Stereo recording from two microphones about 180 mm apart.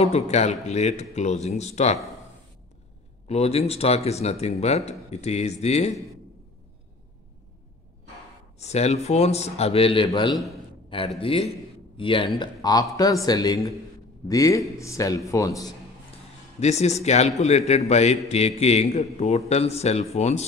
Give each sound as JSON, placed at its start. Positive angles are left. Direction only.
{"t": 0.0, "sound": "a man's voice", "side_deg": 35}
{"t": 3.3, "sound": "a man's voice", "side_deg": 35}
{"t": 8.5, "sound": "a man's voice", "side_deg": 40}
{"t": 10.3, "sound": "a man's voice", "side_deg": 0}
{"t": 11.1, "sound": "a man's voice", "side_deg": 35}
{"t": 16.5, "sound": "a man's voice", "side_deg": 35}